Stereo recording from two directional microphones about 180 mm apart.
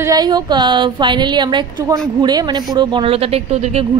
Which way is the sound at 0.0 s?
20° right (ahead or behind).